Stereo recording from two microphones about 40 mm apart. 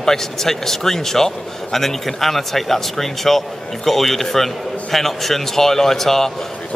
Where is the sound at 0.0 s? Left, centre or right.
Centre.